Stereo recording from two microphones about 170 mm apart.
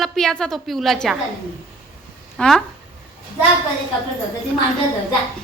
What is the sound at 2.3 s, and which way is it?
Speech, centre (ahead or behind).